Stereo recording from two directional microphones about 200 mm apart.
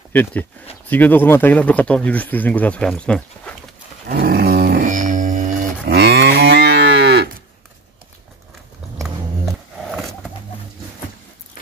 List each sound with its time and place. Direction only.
0.1 s speech: 10° left (ahead or behind)
4.1 s livestock: 50° right (ahead or behind)
9.0 s a sound: centre (ahead or behind)